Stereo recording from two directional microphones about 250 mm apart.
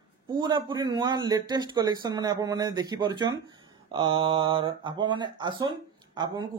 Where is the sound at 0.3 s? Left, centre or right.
Centre.